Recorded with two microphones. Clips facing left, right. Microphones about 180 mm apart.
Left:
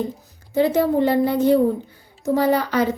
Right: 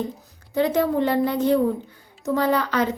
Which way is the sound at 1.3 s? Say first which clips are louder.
Left 3 dB; 10° left (ahead or behind).